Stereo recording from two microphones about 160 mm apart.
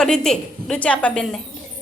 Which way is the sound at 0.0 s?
5° left (ahead or behind).